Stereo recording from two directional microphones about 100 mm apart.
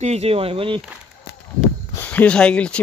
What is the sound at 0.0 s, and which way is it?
Speech, 90° right.